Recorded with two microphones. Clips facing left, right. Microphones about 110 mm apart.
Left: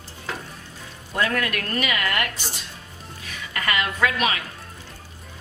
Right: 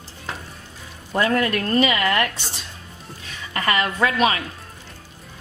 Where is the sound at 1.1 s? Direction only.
30° right (ahead or behind).